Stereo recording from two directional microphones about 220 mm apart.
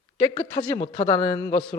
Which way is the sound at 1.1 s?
10° left (ahead or behind).